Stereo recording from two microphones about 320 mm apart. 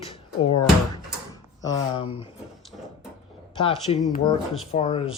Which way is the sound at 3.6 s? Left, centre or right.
Centre.